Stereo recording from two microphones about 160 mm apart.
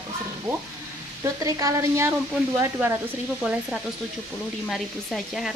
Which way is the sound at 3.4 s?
5° right (ahead or behind).